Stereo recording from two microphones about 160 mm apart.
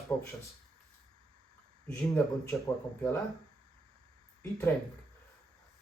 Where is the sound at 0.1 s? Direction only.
20° left (ahead or behind).